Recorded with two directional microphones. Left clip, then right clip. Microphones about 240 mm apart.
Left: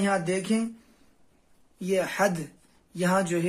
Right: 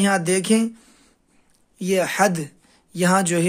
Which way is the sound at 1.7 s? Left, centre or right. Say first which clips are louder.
Right 6 dB; right.